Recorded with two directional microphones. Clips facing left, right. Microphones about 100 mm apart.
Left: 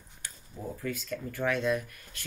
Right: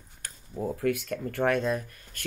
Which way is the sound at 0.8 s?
65° right (ahead or behind).